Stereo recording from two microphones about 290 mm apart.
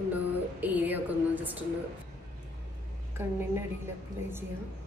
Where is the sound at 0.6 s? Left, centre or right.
Centre.